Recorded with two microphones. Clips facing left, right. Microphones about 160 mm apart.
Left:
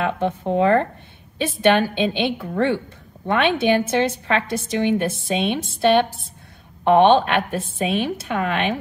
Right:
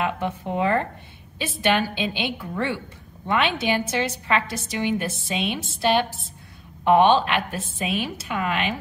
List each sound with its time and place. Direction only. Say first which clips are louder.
0.0 s a woman's voice: left 4 dB; 55° left (ahead or behind)